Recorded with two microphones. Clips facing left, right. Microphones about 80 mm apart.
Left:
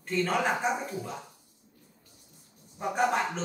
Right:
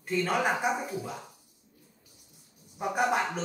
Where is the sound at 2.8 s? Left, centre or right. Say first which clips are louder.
Even; centre.